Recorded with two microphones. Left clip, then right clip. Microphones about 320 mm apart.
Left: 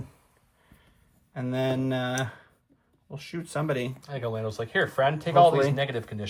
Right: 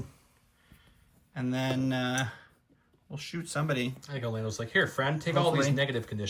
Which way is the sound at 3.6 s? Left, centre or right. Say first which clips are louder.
Left 3 dB; centre.